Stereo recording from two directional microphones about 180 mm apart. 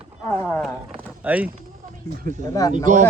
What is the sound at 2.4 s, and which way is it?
Speech, 20° left (ahead or behind).